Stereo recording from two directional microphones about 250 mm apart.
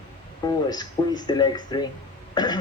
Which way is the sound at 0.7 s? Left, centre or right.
Centre.